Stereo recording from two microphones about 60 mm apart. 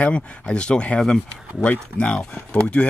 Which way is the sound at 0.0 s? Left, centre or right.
Centre.